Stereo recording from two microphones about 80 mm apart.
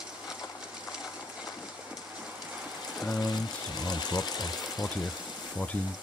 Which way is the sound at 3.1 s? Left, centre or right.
Left.